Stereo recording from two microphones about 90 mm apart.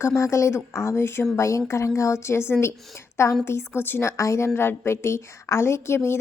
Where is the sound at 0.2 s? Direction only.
35° left (ahead or behind).